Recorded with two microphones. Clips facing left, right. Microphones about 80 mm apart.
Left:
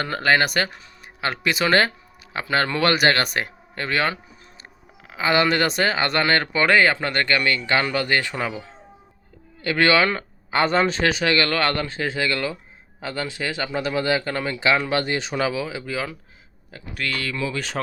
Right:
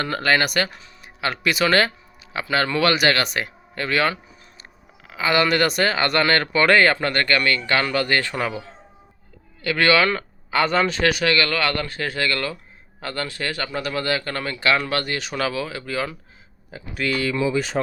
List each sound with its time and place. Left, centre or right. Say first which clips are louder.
0.0 s speech: left 1 dB; left; by 16.1 s centre
16.7 s speech: right 4 dB; centre